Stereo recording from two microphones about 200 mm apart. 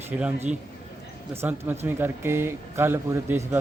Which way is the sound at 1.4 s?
10° right (ahead or behind).